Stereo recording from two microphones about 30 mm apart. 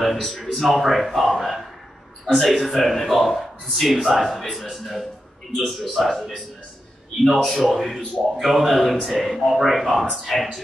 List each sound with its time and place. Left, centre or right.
0.0 s speech: centre
7.3 s speech: centre